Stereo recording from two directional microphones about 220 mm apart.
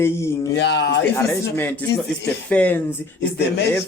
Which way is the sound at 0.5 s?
55° left (ahead or behind).